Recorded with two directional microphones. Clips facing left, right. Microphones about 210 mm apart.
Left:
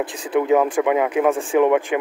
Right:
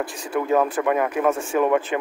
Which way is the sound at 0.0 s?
20° left (ahead or behind).